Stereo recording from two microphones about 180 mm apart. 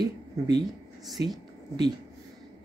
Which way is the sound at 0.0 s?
65° right (ahead or behind).